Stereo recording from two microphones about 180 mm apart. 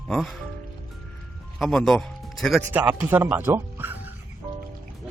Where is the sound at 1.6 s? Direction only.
Centre (ahead or behind).